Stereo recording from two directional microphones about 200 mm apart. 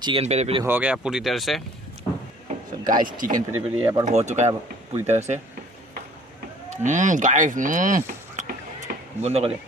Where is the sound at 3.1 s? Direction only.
45° right (ahead or behind).